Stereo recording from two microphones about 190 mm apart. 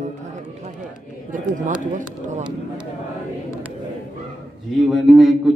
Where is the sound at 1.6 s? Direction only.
40° right (ahead or behind).